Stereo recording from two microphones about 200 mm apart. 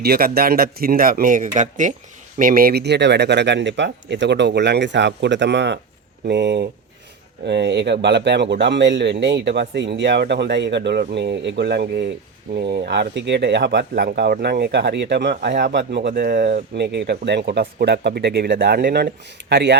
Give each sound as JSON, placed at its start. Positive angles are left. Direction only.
{"t": 0.0, "sound": "speech", "side_deg": -50}